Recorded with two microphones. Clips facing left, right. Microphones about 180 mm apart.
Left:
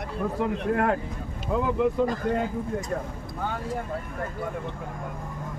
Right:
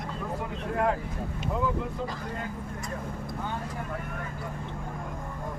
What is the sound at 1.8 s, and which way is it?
Speech, 75° left (ahead or behind).